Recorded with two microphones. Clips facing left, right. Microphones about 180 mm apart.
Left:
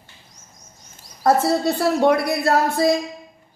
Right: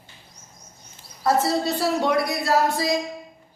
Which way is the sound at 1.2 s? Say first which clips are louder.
Left 4 dB; 55° left (ahead or behind).